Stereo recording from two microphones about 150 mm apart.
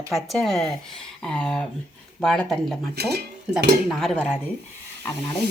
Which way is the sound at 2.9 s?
90° right.